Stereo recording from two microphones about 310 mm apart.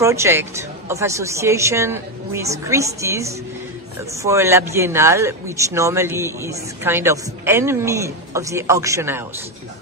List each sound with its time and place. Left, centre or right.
0.0 s a man's voice: centre